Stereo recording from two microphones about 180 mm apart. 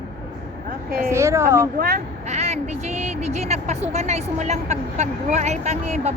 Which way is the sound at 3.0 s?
40° right (ahead or behind).